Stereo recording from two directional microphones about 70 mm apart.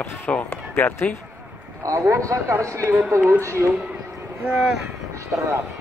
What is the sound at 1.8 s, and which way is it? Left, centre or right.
Speech, right.